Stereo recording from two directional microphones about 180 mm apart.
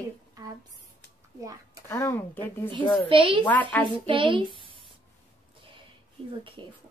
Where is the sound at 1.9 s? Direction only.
15° left (ahead or behind).